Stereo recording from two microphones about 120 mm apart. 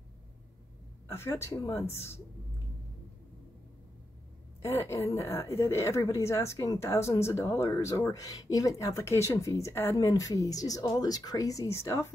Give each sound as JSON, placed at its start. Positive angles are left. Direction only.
{"t": 1.0, "sound": "a woman's voice", "side_deg": 20}
{"t": 4.6, "sound": "a woman's voice", "side_deg": 20}